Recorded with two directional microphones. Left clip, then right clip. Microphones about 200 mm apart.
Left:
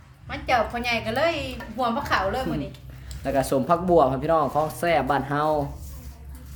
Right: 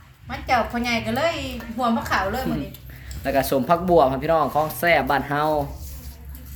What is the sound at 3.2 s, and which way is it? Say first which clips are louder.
Speech: right 2 dB; 5° left (ahead or behind).